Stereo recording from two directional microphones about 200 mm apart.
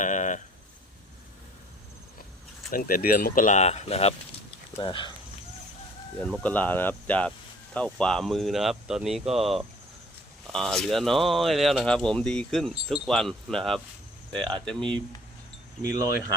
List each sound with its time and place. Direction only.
0.0 s a sound: 40° left (ahead or behind)
2.7 s speech: 45° left (ahead or behind); by 5.1 s 25° left (ahead or behind)
6.2 s speech: 5° left (ahead or behind)